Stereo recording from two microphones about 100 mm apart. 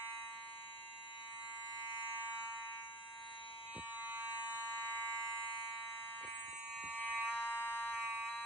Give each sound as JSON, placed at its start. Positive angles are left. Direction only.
{"t": 4.0, "sound": "fire alarm", "side_deg": -15}
{"t": 7.1, "sound": "fire alarm", "side_deg": -10}
{"t": 7.4, "sound": "fire alarm", "side_deg": 20}
{"t": 7.9, "sound": "fire alarm", "side_deg": -10}